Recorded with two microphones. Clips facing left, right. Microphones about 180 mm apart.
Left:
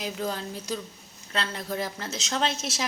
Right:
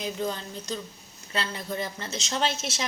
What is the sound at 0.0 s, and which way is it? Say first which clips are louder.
A woman's voice: even; 5° left (ahead or behind).